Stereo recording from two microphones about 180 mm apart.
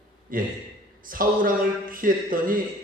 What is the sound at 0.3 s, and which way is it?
A man's voice, 50° right (ahead or behind).